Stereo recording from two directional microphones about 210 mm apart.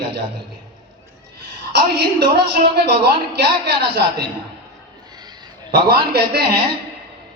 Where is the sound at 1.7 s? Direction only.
50° right (ahead or behind).